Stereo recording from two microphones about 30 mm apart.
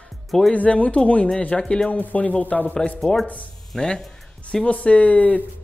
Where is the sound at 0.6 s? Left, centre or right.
Left.